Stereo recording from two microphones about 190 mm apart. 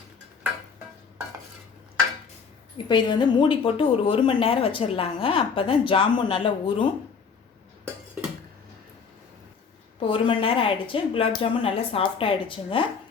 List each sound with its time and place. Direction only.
2.7 s a woman's voice: 25° left (ahead or behind)
10.0 s a woman's voice: 30° left (ahead or behind)